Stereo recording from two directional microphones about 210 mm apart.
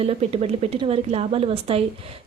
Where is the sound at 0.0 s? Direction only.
30° right (ahead or behind).